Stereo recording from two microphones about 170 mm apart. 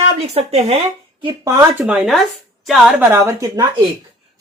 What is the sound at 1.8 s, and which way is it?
Speech, 5° right (ahead or behind).